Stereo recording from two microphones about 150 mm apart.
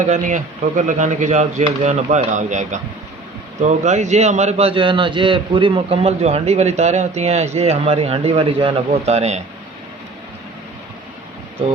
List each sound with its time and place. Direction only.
0.0 s a man's voice: 55° right (ahead or behind)